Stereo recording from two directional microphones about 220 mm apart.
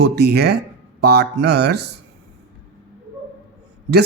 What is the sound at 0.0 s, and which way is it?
Speech, 50° right (ahead or behind).